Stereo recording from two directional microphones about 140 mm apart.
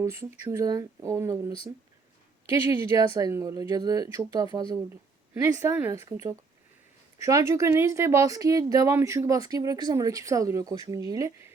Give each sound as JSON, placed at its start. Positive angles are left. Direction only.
{"t": 0.0, "sound": "speech", "side_deg": -20}